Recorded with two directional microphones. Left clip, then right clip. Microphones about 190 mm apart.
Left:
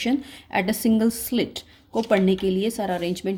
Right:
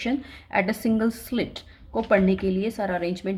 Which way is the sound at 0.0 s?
45° left (ahead or behind).